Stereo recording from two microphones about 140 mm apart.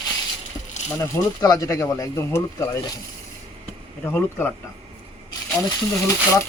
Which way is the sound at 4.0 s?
15° left (ahead or behind).